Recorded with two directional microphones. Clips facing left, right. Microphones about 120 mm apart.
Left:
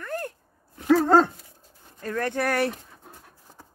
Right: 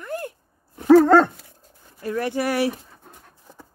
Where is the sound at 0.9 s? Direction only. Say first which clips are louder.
Right 5 dB; 70° right (ahead or behind).